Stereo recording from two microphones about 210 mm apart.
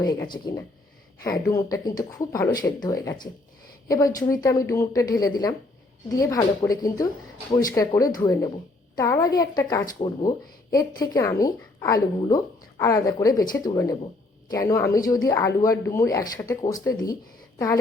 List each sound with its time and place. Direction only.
0.0 s speech: 20° left (ahead or behind)